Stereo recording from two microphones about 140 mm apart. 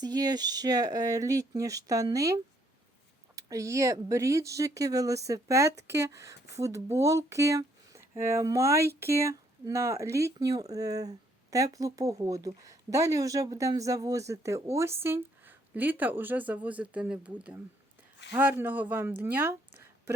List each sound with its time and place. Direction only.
0.0 s speech: 30° right (ahead or behind)